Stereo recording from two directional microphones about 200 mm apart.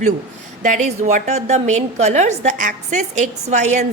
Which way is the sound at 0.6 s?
40° right (ahead or behind).